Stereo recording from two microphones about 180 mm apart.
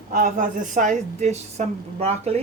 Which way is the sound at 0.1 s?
45° right (ahead or behind).